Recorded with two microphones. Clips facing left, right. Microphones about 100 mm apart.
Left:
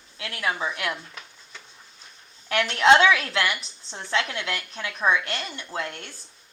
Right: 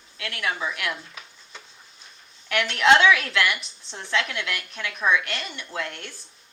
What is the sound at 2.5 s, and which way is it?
A woman's voice, 30° left (ahead or behind).